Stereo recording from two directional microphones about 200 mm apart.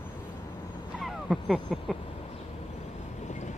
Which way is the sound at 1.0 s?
Centre (ahead or behind).